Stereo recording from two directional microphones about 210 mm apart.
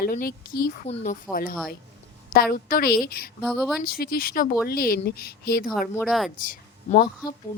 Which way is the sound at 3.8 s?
45° left (ahead or behind).